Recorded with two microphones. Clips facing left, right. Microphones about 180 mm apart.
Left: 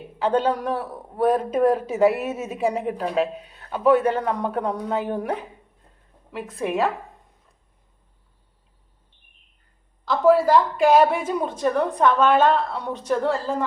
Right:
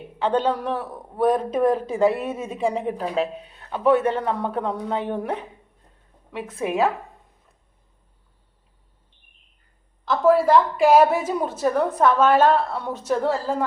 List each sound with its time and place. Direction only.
0.2 s a woman's voice: 5° left (ahead or behind)
6.3 s a woman's voice: centre (ahead or behind)
10.1 s a woman's voice: centre (ahead or behind)